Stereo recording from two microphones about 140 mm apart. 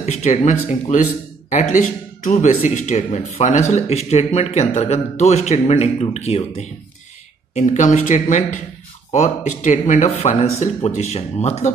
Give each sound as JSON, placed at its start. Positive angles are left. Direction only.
{"t": 0.0, "sound": "speech", "side_deg": 55}
{"t": 7.5, "sound": "speech", "side_deg": 60}